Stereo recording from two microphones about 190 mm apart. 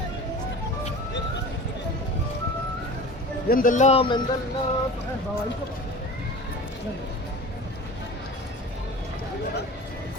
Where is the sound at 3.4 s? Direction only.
45° left (ahead or behind); by 4.2 s 30° left (ahead or behind).